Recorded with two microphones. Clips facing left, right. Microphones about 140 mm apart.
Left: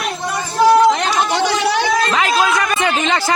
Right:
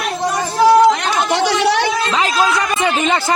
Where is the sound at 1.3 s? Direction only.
65° right (ahead or behind).